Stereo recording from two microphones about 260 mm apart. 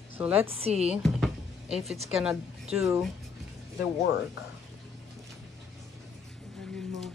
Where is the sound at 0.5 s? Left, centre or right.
Right.